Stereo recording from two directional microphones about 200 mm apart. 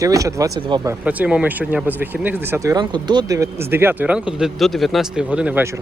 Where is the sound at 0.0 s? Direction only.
15° right (ahead or behind).